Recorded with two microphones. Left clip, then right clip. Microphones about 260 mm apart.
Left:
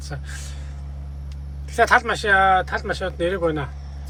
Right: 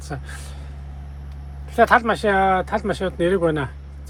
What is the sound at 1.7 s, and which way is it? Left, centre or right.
Speech, centre.